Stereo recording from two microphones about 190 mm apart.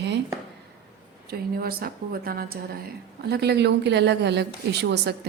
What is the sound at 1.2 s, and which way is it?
A woman's voice, 55° right (ahead or behind).